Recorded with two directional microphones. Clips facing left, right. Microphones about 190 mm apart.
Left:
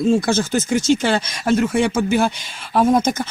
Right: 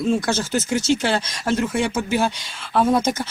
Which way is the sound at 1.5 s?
15° left (ahead or behind).